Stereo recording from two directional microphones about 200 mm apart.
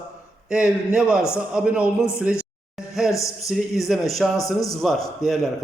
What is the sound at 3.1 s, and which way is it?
Speech, 15° left (ahead or behind).